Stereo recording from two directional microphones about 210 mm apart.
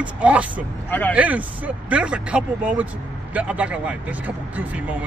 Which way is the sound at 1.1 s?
5° right (ahead or behind).